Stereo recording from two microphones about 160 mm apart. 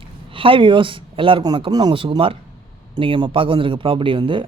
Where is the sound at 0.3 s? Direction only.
35° right (ahead or behind).